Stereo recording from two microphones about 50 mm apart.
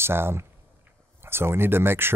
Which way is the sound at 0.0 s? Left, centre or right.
Right.